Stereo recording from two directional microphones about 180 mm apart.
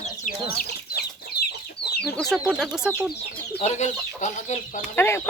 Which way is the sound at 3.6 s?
40° left (ahead or behind).